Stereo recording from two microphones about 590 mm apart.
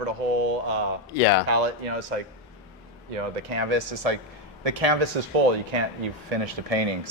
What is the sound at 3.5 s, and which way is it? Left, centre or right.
Speech, right.